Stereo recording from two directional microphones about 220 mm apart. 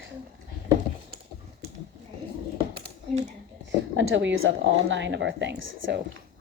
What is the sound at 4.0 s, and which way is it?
Speech, 55° right (ahead or behind).